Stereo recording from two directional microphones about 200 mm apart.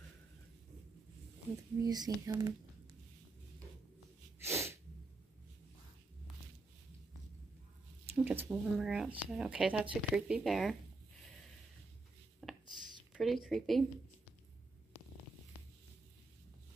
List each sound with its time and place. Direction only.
1.8 s speech: 20° right (ahead or behind)
4.4 s sneeze: 15° right (ahead or behind)
8.2 s speech: 5° right (ahead or behind)
12.4 s a sound: 5° left (ahead or behind)
13.1 s speech: centre (ahead or behind)